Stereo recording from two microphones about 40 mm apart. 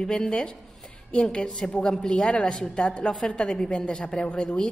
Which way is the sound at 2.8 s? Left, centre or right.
Left.